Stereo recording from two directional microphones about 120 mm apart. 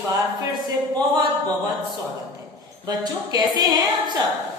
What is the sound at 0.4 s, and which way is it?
Speech, 35° right (ahead or behind).